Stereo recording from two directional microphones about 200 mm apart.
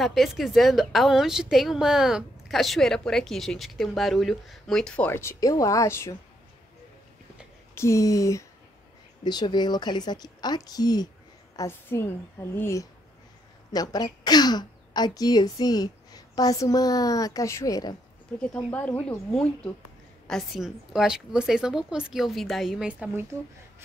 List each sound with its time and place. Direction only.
0.0 s a woman's voice: centre (ahead or behind)
7.7 s a woman's voice: 15° left (ahead or behind)
18.4 s a woman's voice: 5° left (ahead or behind)